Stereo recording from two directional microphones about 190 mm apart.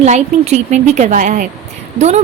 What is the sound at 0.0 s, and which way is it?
A woman's voice, 35° right (ahead or behind).